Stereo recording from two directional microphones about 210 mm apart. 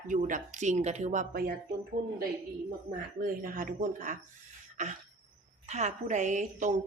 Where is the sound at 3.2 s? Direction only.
40° right (ahead or behind).